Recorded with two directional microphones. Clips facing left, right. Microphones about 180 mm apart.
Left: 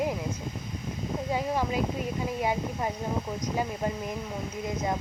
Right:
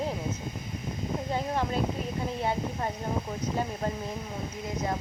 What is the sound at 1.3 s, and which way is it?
Speech, 10° left (ahead or behind).